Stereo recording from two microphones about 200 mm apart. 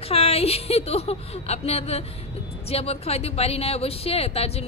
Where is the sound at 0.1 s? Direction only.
30° left (ahead or behind).